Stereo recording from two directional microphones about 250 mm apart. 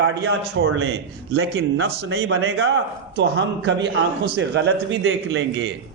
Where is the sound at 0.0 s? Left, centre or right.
Right.